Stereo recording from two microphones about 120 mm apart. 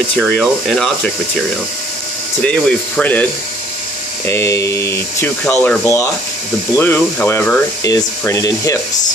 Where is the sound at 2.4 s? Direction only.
10° left (ahead or behind); by 8.7 s 25° left (ahead or behind).